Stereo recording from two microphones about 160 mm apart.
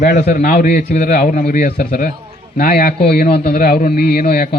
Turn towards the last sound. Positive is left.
turn(degrees=75)  # may be behind; listen again after turning